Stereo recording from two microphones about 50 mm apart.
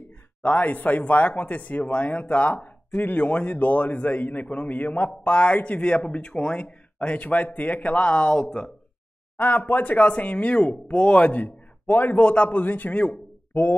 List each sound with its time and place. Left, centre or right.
0.4 s speech: left
8.5 s speech: centre
9.4 s speech: left